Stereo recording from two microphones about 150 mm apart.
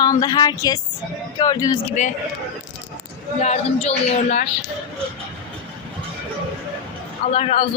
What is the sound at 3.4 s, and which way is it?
Speech, 45° left (ahead or behind).